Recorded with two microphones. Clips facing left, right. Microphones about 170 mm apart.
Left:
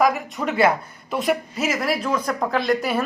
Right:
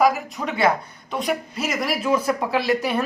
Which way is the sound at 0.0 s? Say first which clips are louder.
Even; centre (ahead or behind).